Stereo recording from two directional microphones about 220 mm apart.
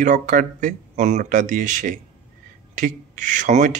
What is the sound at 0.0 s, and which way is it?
Speech, 35° right (ahead or behind).